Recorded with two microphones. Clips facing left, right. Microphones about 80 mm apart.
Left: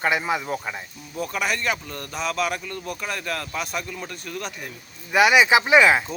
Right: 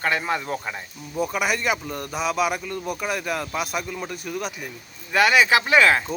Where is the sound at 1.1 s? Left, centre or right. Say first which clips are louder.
Right 2 dB; centre.